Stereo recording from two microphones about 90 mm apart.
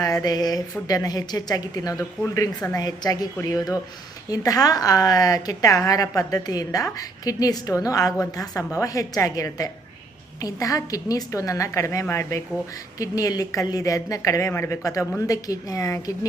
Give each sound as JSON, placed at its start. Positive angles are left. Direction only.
{"t": 0.0, "sound": "a woman's voice", "side_deg": 45}
{"t": 14.5, "sound": "speech", "side_deg": 25}
{"t": 15.3, "sound": "a woman's voice", "side_deg": 40}